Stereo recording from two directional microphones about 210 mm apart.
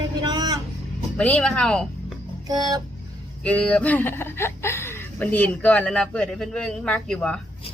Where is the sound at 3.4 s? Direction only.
5° left (ahead or behind).